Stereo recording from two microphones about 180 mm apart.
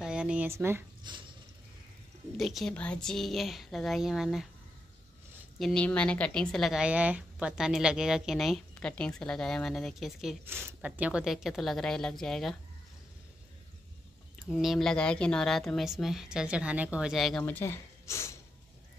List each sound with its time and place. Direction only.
0.0 s a sound: 5° right (ahead or behind)
1.0 s drip: 25° right (ahead or behind)
2.3 s a woman's voice: centre (ahead or behind)
5.6 s a woman's voice: 5° left (ahead or behind)
10.4 s a woman's voice: 15° right (ahead or behind)
14.5 s a woman's voice: centre (ahead or behind); by 18.3 s 15° left (ahead or behind)